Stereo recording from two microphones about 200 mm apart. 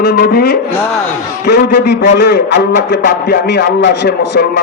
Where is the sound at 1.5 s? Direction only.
55° left (ahead or behind).